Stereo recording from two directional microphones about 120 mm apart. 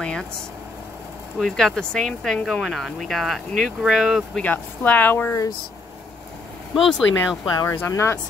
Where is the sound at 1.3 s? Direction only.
5° left (ahead or behind).